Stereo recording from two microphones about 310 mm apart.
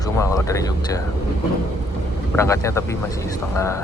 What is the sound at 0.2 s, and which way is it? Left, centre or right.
Speech, centre.